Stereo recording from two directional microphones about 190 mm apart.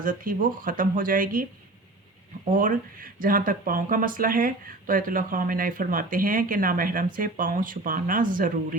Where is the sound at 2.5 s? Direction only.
45° right (ahead or behind).